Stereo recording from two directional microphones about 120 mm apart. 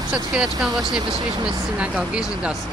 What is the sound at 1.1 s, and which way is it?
Speech, 40° right (ahead or behind).